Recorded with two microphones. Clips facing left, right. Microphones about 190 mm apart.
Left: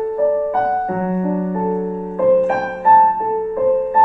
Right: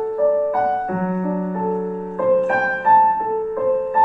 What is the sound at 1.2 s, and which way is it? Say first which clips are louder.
Music: left 3 dB; 20° left (ahead or behind).